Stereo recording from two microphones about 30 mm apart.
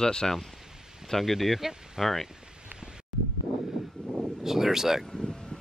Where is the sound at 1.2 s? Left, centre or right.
Centre.